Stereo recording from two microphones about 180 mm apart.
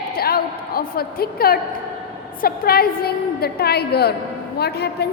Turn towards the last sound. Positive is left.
turn(degrees=65)  # may be behind; listen again after turning